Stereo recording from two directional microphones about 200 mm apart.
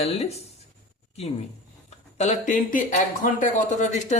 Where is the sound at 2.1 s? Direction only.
35° left (ahead or behind).